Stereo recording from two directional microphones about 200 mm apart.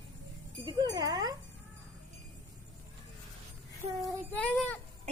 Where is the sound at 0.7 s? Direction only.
20° right (ahead or behind).